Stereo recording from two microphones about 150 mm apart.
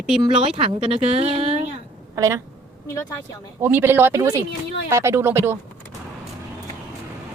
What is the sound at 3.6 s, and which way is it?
Speech, 15° right (ahead or behind).